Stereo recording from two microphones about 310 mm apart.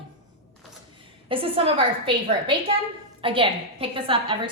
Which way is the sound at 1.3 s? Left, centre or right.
Centre.